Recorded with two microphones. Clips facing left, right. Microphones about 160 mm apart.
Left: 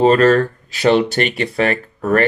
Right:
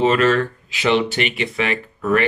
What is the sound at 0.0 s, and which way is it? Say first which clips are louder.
Speech: left 5 dB; 40° left (ahead or behind).